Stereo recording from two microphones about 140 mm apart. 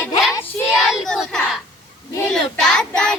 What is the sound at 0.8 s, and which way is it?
A child's voice, centre (ahead or behind).